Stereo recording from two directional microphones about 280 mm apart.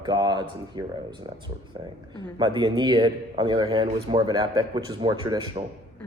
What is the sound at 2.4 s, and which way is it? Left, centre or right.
Speech, centre.